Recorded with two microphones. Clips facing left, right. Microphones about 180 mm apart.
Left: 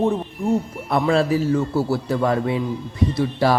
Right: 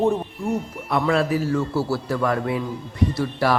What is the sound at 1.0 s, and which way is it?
A man's voice, 25° left (ahead or behind).